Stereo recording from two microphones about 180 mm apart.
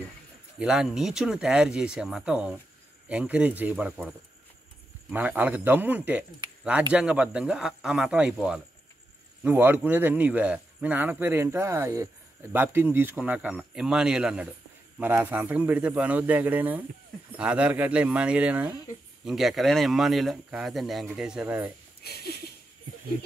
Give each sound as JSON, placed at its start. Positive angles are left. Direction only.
{"t": 0.6, "sound": "speech", "side_deg": -5}
{"t": 5.1, "sound": "speech", "side_deg": -10}
{"t": 22.0, "sound": "a sound", "side_deg": 60}